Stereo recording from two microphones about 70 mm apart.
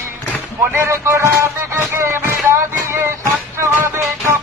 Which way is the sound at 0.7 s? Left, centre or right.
Right.